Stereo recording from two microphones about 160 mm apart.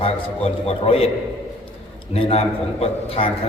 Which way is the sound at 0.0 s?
35° left (ahead or behind).